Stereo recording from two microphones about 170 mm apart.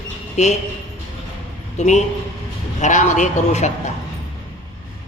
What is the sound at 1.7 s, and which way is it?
A man's voice, 45° left (ahead or behind).